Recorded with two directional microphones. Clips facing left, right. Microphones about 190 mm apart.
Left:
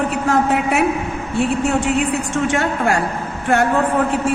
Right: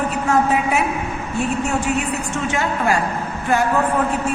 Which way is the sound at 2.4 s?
65° left (ahead or behind).